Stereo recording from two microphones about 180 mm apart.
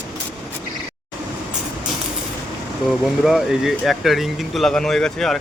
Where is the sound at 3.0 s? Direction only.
Centre (ahead or behind).